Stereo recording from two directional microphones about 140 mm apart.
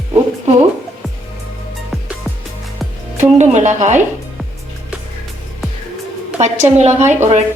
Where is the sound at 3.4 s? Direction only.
55° right (ahead or behind).